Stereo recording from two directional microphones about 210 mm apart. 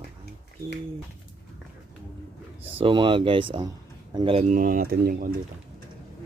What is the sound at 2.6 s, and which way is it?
A man's voice, 25° right (ahead or behind).